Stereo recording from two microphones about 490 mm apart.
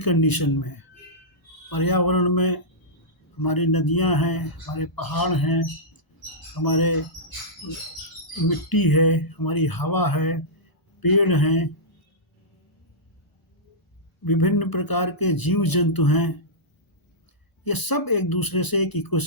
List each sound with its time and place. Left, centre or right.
0.0 s speech: left
8.4 s speech: left
14.3 s speech: left
17.6 s speech: left